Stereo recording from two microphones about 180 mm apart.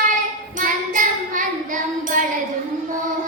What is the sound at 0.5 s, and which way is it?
Child singing, 45° right (ahead or behind).